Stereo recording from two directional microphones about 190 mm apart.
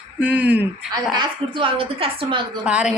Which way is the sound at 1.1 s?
25° right (ahead or behind).